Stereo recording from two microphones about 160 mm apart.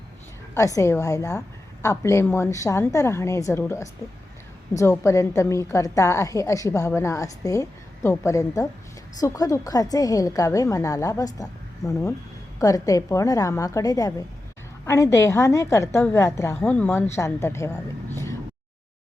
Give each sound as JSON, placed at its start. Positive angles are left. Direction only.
{"t": 0.5, "sound": "a woman's voice", "side_deg": 20}